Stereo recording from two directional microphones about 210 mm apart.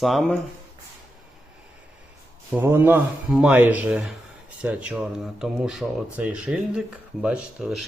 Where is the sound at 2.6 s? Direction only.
10° right (ahead or behind).